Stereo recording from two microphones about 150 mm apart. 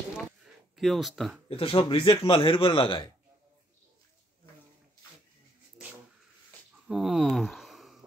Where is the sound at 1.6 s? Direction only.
35° left (ahead or behind).